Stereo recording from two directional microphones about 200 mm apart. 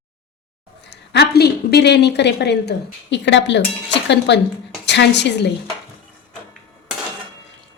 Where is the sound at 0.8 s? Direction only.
55° left (ahead or behind).